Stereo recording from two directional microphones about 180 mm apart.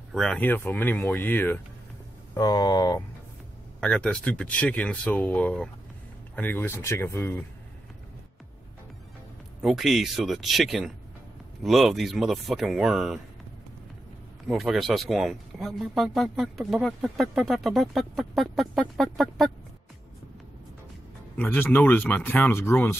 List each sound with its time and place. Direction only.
0.1 s speech: 5° left (ahead or behind); by 3.0 s 20° left (ahead or behind)
3.8 s speech: 5° left (ahead or behind)
9.6 s speech: centre (ahead or behind)
14.5 s speech: centre (ahead or behind)
21.4 s speech: 10° left (ahead or behind)